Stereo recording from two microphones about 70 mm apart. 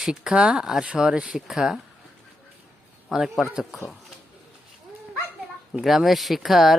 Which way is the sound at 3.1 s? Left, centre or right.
Centre.